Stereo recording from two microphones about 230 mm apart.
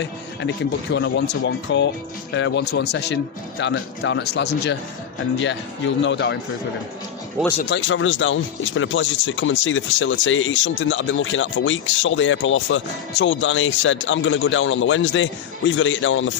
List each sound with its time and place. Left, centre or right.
0.9 s speech: left
7.7 s speech: left